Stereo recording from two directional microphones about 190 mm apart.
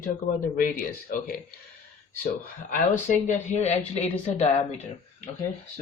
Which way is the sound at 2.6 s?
40° left (ahead or behind).